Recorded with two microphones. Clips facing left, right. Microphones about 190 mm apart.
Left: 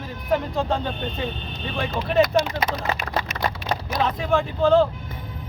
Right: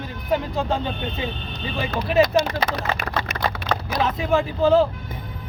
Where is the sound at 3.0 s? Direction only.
60° right (ahead or behind).